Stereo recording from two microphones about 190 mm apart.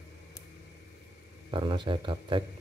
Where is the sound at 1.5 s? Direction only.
25° right (ahead or behind).